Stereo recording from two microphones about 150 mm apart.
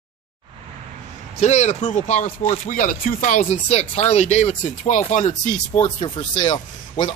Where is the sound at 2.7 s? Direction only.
65° left (ahead or behind).